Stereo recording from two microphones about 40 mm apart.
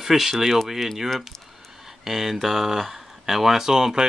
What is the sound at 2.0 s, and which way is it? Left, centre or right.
Speech, centre.